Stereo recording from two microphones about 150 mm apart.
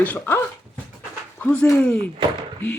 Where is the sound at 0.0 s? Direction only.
15° left (ahead or behind).